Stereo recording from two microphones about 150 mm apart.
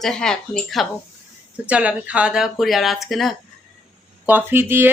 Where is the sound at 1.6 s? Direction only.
10° right (ahead or behind).